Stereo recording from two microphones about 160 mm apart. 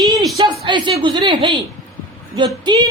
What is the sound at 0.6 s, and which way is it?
A woman's voice, 30° right (ahead or behind).